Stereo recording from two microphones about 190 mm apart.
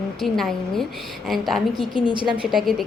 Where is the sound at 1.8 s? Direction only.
25° left (ahead or behind).